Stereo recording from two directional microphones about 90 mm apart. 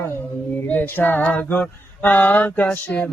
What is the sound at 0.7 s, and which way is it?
Female singing, 20° left (ahead or behind).